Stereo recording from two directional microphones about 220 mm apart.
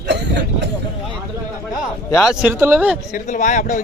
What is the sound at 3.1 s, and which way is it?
Speech, 35° left (ahead or behind).